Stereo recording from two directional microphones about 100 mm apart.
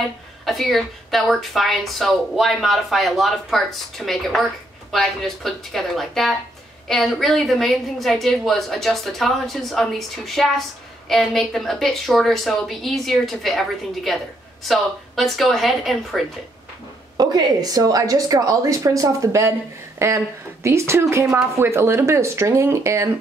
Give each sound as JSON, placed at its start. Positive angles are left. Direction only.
{"t": 0.5, "sound": "a woman's voice", "side_deg": 0}
{"t": 17.2, "sound": "a woman's voice", "side_deg": -40}